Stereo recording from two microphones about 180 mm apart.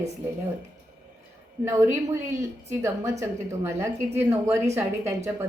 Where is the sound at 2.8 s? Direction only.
15° right (ahead or behind).